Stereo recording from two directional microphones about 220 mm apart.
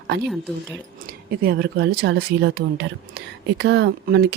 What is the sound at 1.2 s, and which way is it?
Speech, 45° right (ahead or behind).